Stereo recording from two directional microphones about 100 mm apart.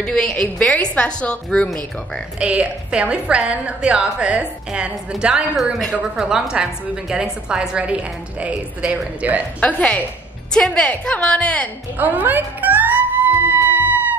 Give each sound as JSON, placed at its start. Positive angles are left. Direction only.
{"t": 0.0, "sound": "a woman's voice", "side_deg": 10}
{"t": 2.3, "sound": "a woman's voice", "side_deg": -10}
{"t": 9.6, "sound": "a woman's voice", "side_deg": 15}
{"t": 12.0, "sound": "music", "side_deg": -20}